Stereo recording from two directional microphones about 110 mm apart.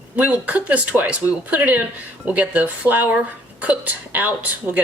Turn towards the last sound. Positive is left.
turn(degrees=-15)  # may be behind; listen again after turning